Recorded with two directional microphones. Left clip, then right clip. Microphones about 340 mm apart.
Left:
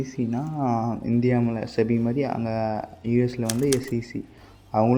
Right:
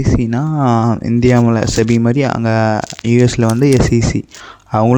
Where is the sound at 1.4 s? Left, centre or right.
Right.